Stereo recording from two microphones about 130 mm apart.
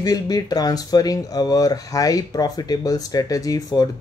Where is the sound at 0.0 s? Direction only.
30° left (ahead or behind).